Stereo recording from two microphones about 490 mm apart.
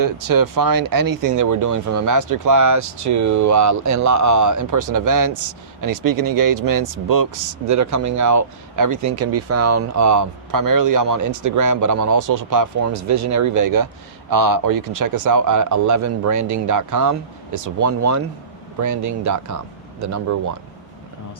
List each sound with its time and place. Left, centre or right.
0.0 s speech: right